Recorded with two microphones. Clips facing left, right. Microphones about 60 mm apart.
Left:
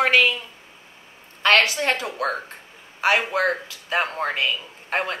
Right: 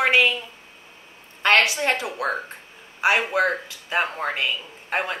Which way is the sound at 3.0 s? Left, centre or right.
Centre.